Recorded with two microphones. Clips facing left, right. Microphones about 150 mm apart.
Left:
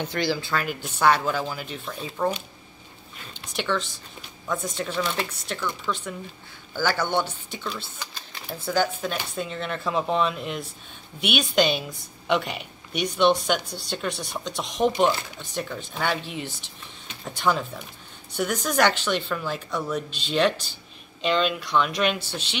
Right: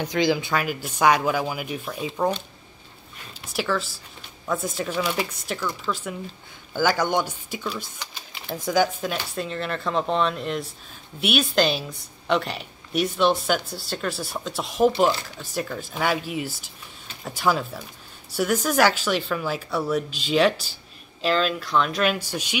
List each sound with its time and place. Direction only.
0.0 s speech: 15° right (ahead or behind)
3.5 s a woman's voice: 5° right (ahead or behind)
9.3 s a woman's voice: centre (ahead or behind)